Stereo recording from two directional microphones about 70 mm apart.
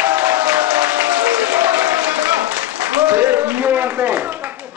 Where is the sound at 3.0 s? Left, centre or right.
Right.